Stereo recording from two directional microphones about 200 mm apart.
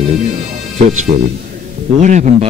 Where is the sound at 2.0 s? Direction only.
40° right (ahead or behind).